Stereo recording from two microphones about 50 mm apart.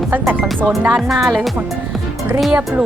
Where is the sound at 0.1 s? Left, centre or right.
Right.